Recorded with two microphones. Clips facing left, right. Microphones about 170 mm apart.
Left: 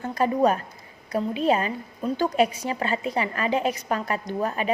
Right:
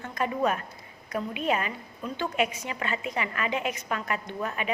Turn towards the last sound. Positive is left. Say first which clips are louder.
# left 6 dB
turn(degrees=35)  # may be behind; listen again after turning